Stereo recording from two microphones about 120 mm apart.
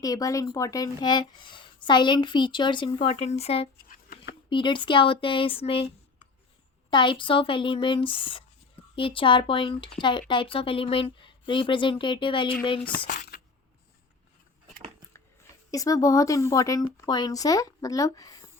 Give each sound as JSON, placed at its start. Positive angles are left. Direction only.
{"t": 0.0, "sound": "speech", "side_deg": 30}
{"t": 3.2, "sound": "speech", "side_deg": 60}
{"t": 4.4, "sound": "speech", "side_deg": 40}
{"t": 6.9, "sound": "speech", "side_deg": 40}
{"t": 15.7, "sound": "speech", "side_deg": 30}